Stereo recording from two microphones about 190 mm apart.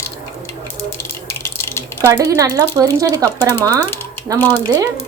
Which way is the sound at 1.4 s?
15° left (ahead or behind).